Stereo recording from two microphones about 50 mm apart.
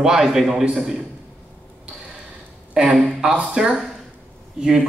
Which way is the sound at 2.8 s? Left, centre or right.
Centre.